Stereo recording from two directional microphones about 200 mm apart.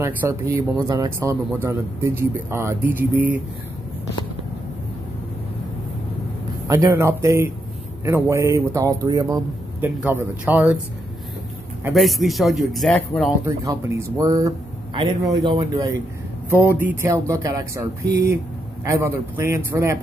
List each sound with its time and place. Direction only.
0.0 s speech: 15° right (ahead or behind)
6.7 s speech: 15° right (ahead or behind)
11.8 s speech: centre (ahead or behind)
13.5 s speech: 15° right (ahead or behind)
18.0 s speech: 50° right (ahead or behind)
18.9 s speech: 15° right (ahead or behind)